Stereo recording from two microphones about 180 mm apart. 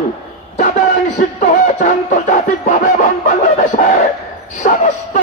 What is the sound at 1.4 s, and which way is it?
Music, 45° left (ahead or behind).